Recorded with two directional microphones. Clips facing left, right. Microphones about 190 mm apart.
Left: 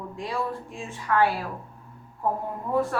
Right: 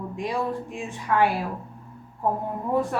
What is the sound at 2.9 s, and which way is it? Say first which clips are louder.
Speech: right 4 dB; 20° right (ahead or behind).